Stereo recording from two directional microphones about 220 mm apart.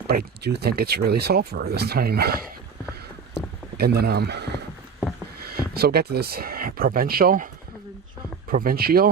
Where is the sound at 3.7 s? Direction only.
45° right (ahead or behind).